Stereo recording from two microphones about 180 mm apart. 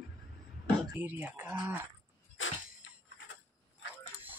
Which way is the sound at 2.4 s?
90° left.